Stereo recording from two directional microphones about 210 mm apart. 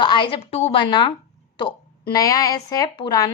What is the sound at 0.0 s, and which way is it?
Speech, 20° left (ahead or behind).